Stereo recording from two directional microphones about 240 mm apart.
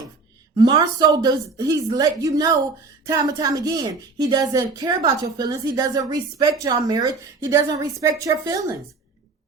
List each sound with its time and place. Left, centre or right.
0.5 s a woman's voice: centre